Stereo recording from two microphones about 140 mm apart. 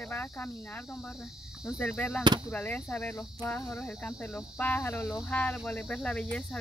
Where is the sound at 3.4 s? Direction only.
25° left (ahead or behind).